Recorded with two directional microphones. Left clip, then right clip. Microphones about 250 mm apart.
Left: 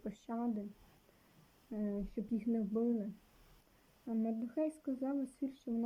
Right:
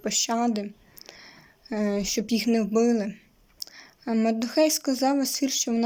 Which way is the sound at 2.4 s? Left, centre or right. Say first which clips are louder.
Right 14 dB; centre.